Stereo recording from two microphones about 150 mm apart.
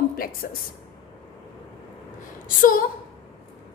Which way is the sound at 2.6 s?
70° left (ahead or behind).